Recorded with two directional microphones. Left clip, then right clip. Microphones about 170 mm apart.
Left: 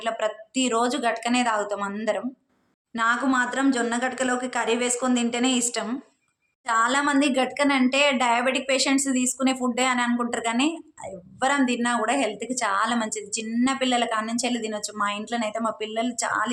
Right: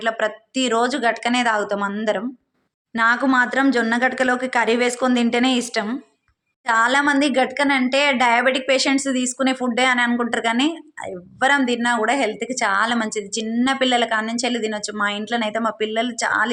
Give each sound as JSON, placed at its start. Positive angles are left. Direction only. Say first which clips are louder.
{"t": 0.0, "sound": "a woman's voice", "louder": "right 5 dB", "side_deg": -20}
{"t": 2.9, "sound": "a woman's voice", "louder": "right 5 dB", "side_deg": -30}